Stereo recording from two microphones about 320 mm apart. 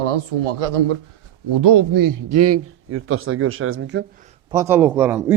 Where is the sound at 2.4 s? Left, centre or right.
Right.